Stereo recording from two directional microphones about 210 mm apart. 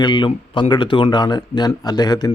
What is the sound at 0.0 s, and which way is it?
Speech, 20° left (ahead or behind).